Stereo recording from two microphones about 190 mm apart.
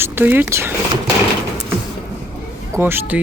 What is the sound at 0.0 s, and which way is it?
Speech, 10° right (ahead or behind).